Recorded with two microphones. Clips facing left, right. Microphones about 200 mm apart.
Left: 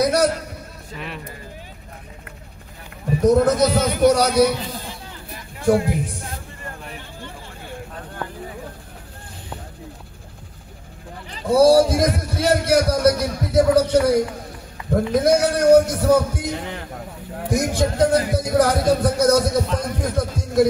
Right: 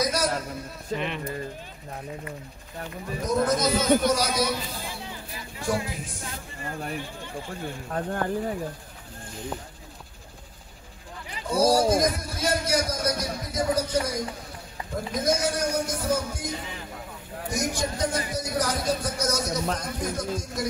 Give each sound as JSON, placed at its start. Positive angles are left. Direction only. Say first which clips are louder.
{"t": 0.0, "sound": "a sound", "louder": "left 8 dB", "side_deg": 65}
{"t": 0.9, "sound": "speech", "louder": "right 4 dB", "side_deg": 5}
{"t": 3.3, "sound": "speech", "louder": "left 8 dB", "side_deg": 65}
{"t": 5.6, "sound": "speech", "louder": "left 11 dB", "side_deg": 55}
{"t": 11.4, "sound": "speech", "louder": "left 8 dB", "side_deg": 65}